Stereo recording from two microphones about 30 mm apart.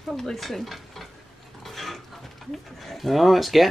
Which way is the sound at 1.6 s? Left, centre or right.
Centre.